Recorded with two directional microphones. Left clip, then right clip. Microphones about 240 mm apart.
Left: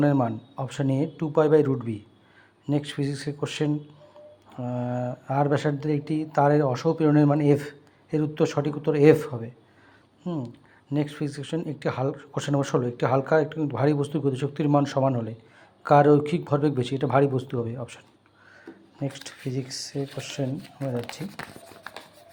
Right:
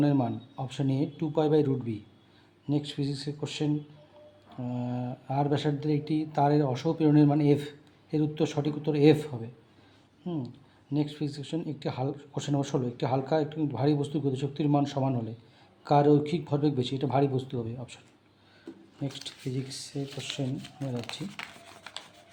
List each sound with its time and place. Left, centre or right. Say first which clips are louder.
0.0 s speech: left 4 dB; centre
10.9 s speech: left 3 dB; centre
19.0 s speech: left 3 dB; centre
20.2 s speech: left 3 dB; centre
20.7 s speech: left 6 dB; left